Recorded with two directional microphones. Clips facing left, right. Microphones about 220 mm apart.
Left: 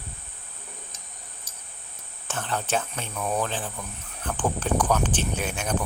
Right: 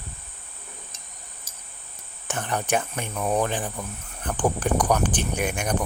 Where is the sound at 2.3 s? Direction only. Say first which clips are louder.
Right 2 dB; 15° right (ahead or behind).